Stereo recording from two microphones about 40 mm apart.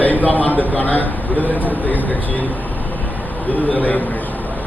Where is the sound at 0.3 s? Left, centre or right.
Left.